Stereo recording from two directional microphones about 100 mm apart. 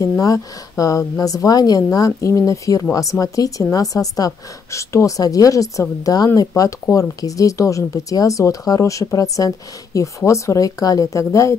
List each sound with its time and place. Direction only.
0.2 s a woman's voice: 35° left (ahead or behind)